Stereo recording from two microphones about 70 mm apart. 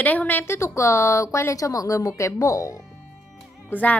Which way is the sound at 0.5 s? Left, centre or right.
Left.